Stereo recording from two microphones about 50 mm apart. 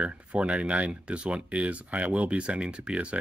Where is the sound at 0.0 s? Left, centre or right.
Right.